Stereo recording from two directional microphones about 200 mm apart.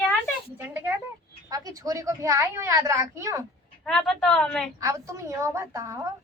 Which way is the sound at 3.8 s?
5° left (ahead or behind).